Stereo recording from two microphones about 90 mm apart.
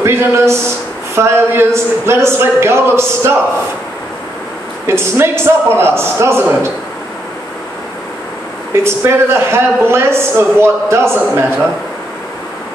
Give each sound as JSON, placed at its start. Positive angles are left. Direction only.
{"t": 0.0, "sound": "a man's voice", "side_deg": -30}
{"t": 4.8, "sound": "a man's voice", "side_deg": -25}
{"t": 8.8, "sound": "a man's voice", "side_deg": -30}